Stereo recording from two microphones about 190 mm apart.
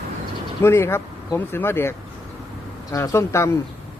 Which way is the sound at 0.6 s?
15° left (ahead or behind).